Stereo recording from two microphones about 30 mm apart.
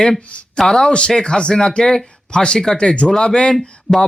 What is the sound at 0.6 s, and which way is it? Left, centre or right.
Speech, centre.